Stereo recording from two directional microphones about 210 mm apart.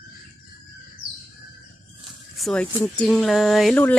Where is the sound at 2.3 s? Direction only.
5° left (ahead or behind).